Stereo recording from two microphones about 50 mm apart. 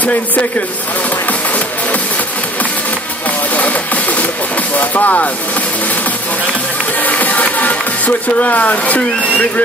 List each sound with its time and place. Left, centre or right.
3.5 s music: left
4.7 s speech: left
7.0 s music: left